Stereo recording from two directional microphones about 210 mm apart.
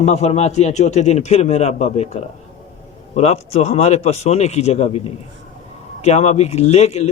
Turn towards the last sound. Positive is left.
turn(degrees=30)  # may be behind; listen again after turning